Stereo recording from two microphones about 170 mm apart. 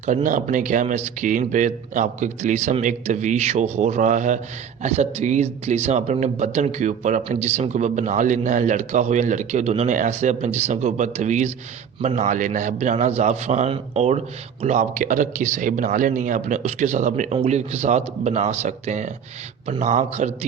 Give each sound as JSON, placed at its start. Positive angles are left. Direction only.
{"t": 0.0, "sound": "speech", "side_deg": -45}